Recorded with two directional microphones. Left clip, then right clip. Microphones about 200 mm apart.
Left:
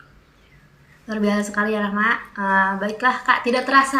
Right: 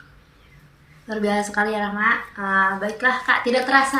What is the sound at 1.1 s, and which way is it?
Speech, 20° left (ahead or behind).